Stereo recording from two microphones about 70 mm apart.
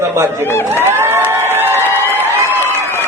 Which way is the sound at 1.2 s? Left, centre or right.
Right.